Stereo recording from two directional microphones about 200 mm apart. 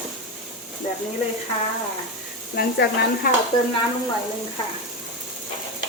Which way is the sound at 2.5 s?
55° left (ahead or behind).